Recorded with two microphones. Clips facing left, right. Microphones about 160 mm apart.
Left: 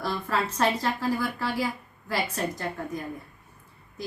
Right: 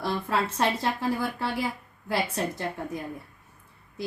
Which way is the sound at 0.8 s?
20° right (ahead or behind).